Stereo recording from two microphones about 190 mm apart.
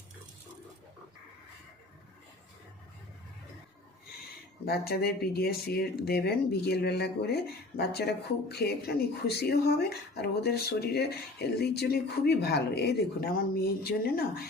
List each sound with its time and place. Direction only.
4.6 s speech: 55° left (ahead or behind)